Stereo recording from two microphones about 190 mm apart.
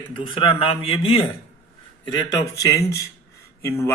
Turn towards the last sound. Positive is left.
turn(degrees=15)  # may be behind; listen again after turning